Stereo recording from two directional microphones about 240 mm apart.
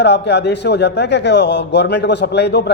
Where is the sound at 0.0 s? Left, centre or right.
Left.